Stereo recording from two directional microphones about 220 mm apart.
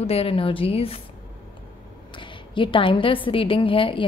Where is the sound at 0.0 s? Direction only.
25° left (ahead or behind).